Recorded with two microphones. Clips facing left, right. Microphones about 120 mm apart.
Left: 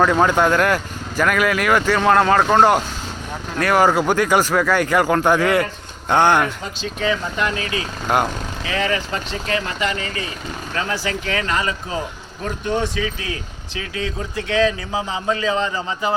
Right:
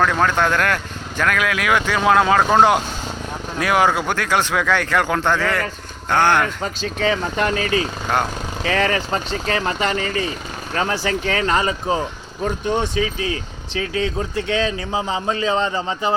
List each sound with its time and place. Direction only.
0.0 s speech: 10° left (ahead or behind)
7.3 s speech: 35° right (ahead or behind)
10.8 s speech: 35° right (ahead or behind)
13.0 s a man's voice: 25° right (ahead or behind)